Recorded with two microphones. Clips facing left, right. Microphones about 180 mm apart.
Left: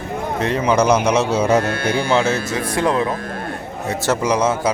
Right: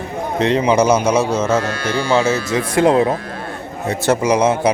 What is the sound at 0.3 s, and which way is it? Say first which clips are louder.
Speech: right 6 dB; 45° left (ahead or behind).